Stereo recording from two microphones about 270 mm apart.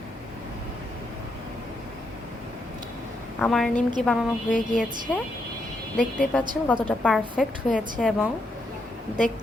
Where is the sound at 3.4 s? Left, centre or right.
Centre.